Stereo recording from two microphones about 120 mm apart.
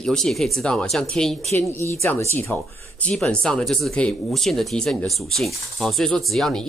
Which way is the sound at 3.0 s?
5° left (ahead or behind).